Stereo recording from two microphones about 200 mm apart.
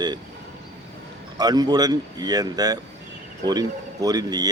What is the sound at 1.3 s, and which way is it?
Speech, 20° right (ahead or behind).